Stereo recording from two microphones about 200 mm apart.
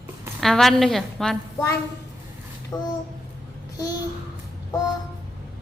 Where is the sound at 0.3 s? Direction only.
Centre (ahead or behind).